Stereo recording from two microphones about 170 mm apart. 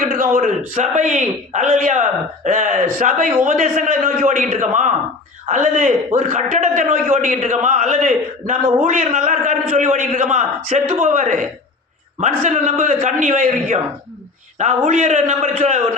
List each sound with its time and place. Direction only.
0.0 s a man's voice: 55° right (ahead or behind)